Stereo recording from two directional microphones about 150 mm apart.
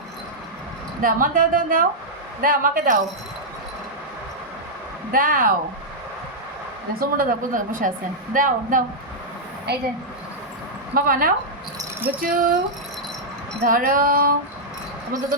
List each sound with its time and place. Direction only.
1.0 s speech: 65° right (ahead or behind)
5.1 s speech: 65° right (ahead or behind)
7.0 s speech: 70° right (ahead or behind)
9.7 s speech: 90° right
10.9 s speech: 70° right (ahead or behind)
11.8 s a sound: 15° right (ahead or behind)
12.2 s speech: 65° right (ahead or behind)
13.6 s speech: 70° right (ahead or behind)